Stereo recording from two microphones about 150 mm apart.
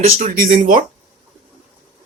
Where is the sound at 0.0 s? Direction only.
50° right (ahead or behind).